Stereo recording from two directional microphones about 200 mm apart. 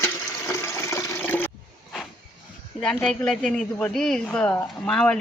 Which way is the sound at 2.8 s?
5° left (ahead or behind).